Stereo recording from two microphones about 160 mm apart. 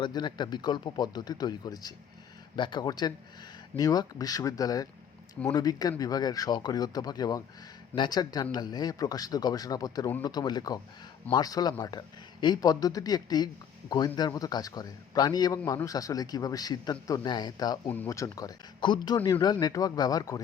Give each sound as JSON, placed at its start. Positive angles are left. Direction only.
{"t": 0.0, "sound": "a man's voice", "side_deg": 25}
{"t": 17.8, "sound": "a man's voice", "side_deg": 10}